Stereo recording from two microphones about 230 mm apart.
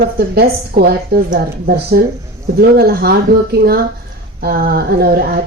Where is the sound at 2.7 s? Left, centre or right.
Right.